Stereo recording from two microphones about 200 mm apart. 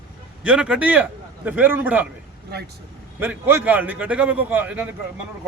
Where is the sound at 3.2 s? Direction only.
10° right (ahead or behind).